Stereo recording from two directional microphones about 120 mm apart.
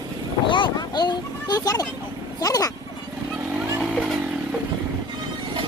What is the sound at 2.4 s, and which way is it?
Speech, 30° left (ahead or behind).